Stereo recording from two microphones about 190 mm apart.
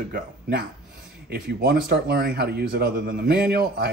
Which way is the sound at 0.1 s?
60° right (ahead or behind).